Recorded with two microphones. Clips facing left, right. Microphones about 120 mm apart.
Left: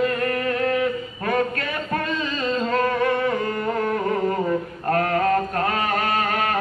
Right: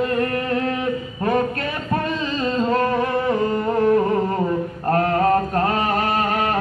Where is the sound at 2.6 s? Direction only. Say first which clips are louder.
Right 2 dB; 25° right (ahead or behind).